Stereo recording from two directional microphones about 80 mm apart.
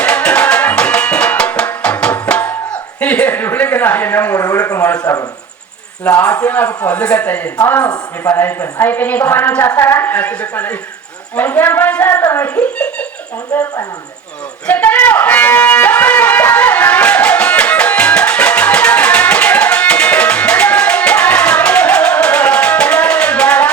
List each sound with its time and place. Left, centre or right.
0.0 s music: centre
3.0 s speech: centre
4.4 s speech: left
4.8 s a woman's voice: left
6.3 s a woman's voice: left
12.5 s a woman's voice: centre
14.7 s a sound: left